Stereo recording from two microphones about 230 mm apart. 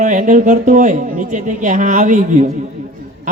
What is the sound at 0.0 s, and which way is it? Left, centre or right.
A man's voice, right.